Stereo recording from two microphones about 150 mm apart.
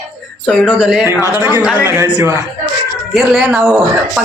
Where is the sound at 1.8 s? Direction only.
15° right (ahead or behind).